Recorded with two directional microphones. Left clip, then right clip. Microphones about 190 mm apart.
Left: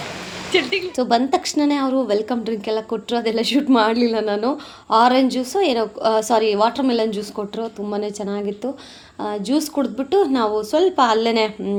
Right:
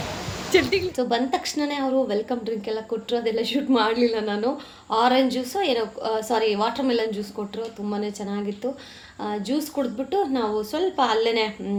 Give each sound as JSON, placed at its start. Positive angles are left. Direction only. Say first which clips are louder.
{"t": 0.5, "sound": "speech", "louder": "left 1 dB", "side_deg": -10}
{"t": 0.9, "sound": "a woman's voice", "louder": "left 5 dB", "side_deg": 40}